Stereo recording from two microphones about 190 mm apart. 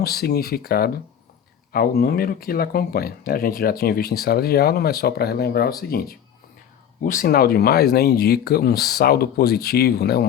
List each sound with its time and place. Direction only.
0.0 s speech: 55° left (ahead or behind)